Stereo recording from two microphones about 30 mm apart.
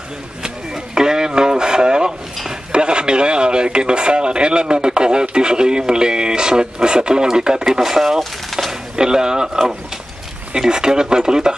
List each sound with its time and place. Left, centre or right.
0.9 s radio: right
2.7 s speech: right; by 8.2 s centre
8.2 s speech: centre
8.9 s speech: right
10.5 s speech: right